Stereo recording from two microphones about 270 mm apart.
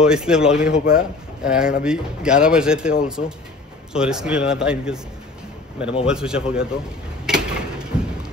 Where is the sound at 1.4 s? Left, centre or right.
Centre.